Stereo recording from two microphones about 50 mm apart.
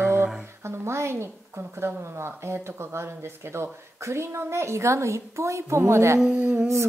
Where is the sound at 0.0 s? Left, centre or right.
Right.